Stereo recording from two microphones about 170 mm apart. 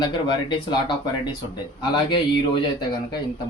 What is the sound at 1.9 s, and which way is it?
Speech, 25° left (ahead or behind).